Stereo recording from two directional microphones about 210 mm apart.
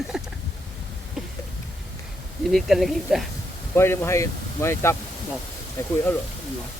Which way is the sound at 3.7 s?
10° left (ahead or behind).